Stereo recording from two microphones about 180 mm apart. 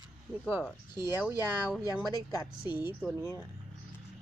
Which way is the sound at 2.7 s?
10° right (ahead or behind).